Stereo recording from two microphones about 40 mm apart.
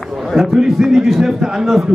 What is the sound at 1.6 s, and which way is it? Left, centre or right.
Speech, centre.